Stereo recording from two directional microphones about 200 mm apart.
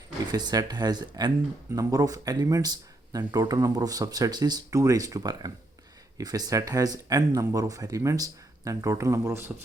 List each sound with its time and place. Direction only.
0.3 s speech: 20° right (ahead or behind)